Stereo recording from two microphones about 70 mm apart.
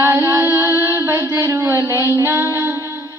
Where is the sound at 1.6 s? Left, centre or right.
Right.